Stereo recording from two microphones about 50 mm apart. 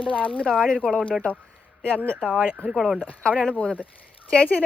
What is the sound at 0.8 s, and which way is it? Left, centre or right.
Speech, centre.